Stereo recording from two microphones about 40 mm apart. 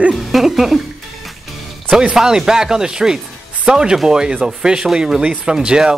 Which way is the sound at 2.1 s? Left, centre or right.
Centre.